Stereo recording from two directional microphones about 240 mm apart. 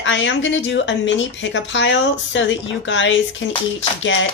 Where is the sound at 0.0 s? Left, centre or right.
Left.